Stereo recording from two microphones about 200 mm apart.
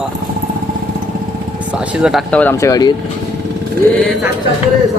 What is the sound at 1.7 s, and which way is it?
Speech, 5° right (ahead or behind).